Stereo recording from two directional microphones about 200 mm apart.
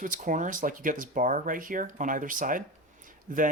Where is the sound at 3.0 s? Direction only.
40° right (ahead or behind).